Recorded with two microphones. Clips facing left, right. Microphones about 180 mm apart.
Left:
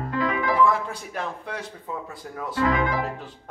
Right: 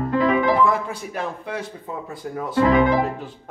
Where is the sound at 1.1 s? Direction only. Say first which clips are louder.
Right 4 dB; 5° right (ahead or behind).